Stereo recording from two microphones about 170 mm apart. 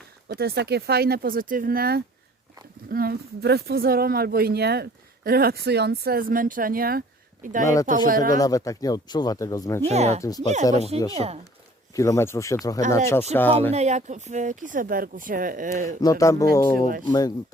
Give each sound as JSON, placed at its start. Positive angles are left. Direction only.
{"t": 0.3, "sound": "a woman's voice", "side_deg": -70}
{"t": 7.6, "sound": "speech", "side_deg": 20}
{"t": 7.9, "sound": "speech", "side_deg": -50}
{"t": 8.4, "sound": "speech", "side_deg": 20}
{"t": 9.8, "sound": "speech", "side_deg": -40}
{"t": 11.9, "sound": "speech", "side_deg": 15}
{"t": 13.7, "sound": "speech", "side_deg": -45}
{"t": 16.0, "sound": "speech", "side_deg": 20}